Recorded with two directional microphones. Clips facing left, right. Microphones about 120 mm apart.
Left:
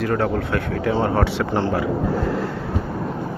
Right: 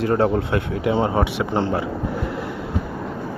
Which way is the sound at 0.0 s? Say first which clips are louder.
Right 2 dB; 25° right (ahead or behind).